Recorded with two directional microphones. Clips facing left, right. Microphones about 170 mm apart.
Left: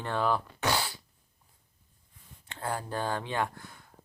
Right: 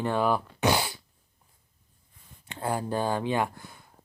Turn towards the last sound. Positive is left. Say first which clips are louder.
# right 5 dB
turn(degrees=-10)  # may be behind; listen again after turning